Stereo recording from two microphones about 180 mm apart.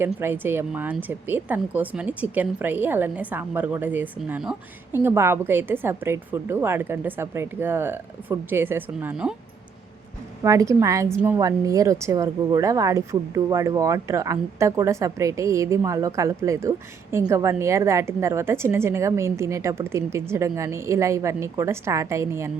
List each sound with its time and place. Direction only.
0.0 s a woman's voice: 10° right (ahead or behind)
10.4 s a woman's voice: 15° right (ahead or behind)